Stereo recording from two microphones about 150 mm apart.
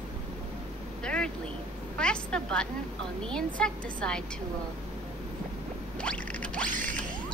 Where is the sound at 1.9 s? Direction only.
5° left (ahead or behind).